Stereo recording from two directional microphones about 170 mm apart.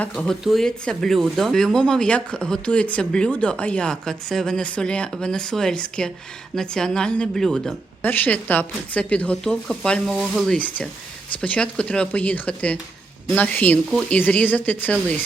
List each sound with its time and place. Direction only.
0.0 s speech: 5° left (ahead or behind)